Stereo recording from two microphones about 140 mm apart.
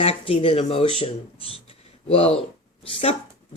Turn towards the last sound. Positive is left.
turn(degrees=40)  # may be behind; listen again after turning